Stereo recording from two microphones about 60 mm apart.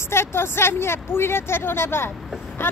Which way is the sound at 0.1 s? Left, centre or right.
Left.